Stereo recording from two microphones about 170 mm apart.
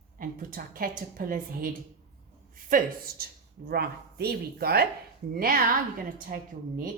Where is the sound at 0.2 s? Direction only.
55° right (ahead or behind).